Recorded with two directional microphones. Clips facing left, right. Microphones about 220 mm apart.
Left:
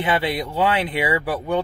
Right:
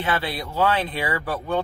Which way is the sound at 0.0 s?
15° left (ahead or behind).